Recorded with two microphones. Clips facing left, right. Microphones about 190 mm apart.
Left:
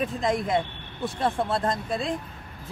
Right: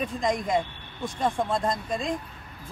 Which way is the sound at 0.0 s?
5° left (ahead or behind).